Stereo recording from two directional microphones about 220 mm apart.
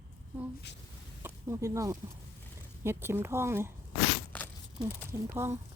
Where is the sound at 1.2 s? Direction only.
15° right (ahead or behind).